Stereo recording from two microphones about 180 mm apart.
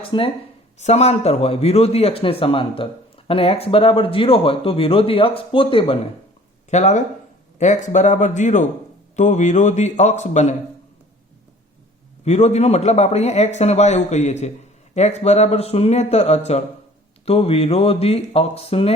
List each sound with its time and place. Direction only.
0.1 s speech: 25° left (ahead or behind)
0.8 s a man's voice: 35° left (ahead or behind)
6.7 s a man's voice: 40° left (ahead or behind)
12.2 s a man's voice: 35° left (ahead or behind)